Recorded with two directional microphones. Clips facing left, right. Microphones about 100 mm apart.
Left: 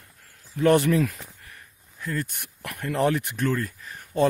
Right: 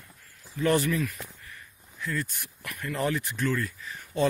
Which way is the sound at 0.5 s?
60° left (ahead or behind).